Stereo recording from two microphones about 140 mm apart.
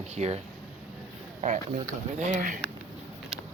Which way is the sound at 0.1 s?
50° right (ahead or behind).